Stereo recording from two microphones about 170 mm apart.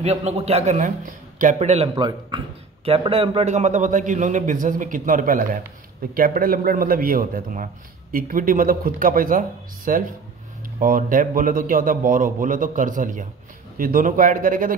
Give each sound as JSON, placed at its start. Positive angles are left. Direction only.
{"t": 0.0, "sound": "a man's voice", "side_deg": -40}